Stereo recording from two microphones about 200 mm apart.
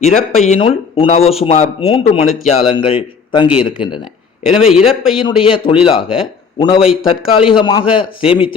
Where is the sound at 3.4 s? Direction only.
5° right (ahead or behind).